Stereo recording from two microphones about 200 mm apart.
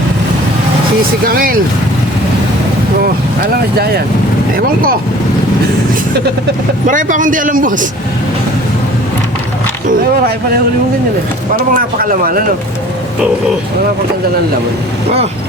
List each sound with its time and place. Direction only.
1.3 s speech: 45° right (ahead or behind)
3.5 s speech: 50° right (ahead or behind)
6.8 s a man's voice: 40° right (ahead or behind)
11.7 s speech: 45° right (ahead or behind)